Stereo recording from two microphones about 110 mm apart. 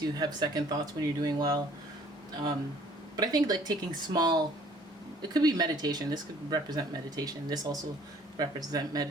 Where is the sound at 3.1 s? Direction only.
35° right (ahead or behind).